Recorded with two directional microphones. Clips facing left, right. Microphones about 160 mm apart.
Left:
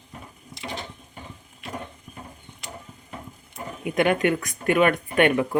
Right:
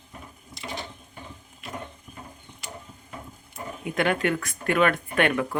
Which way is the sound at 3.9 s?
15° left (ahead or behind).